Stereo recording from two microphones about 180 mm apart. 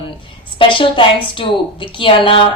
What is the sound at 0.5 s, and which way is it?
A woman's voice, 30° left (ahead or behind).